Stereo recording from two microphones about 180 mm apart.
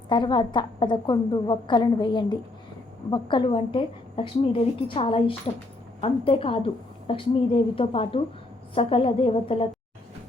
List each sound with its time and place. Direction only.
0.1 s a woman's voice: 25° left (ahead or behind)